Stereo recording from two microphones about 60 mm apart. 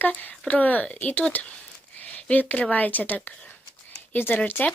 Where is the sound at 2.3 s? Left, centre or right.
Left.